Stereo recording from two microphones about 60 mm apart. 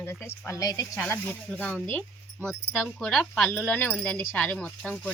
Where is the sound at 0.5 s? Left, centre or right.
Left.